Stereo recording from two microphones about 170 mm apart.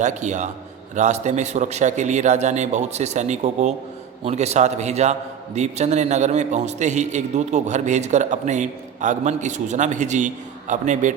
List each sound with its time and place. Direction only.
0.0 s a man's voice: 45° right (ahead or behind)